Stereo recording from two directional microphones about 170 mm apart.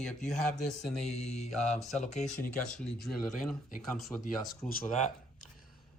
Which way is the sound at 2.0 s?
45° left (ahead or behind).